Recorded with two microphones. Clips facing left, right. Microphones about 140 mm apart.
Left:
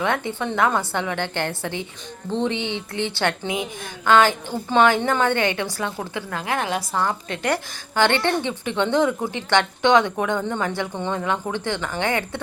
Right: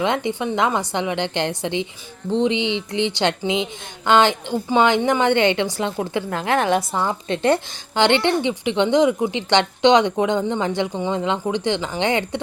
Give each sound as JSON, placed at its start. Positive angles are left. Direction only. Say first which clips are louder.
{"t": 0.0, "sound": "speech", "louder": "right 3 dB", "side_deg": -15}